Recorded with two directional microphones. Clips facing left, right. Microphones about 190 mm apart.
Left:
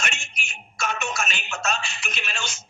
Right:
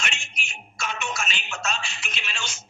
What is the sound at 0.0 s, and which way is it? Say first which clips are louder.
Music: left 2 dB; 45° left (ahead or behind).